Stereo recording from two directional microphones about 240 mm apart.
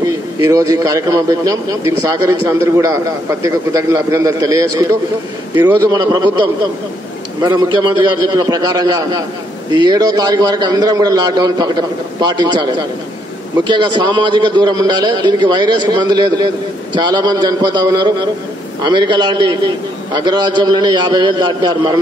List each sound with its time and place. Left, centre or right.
0.0 s a man's voice: centre
7.4 s a man's voice: centre
13.7 s a man's voice: centre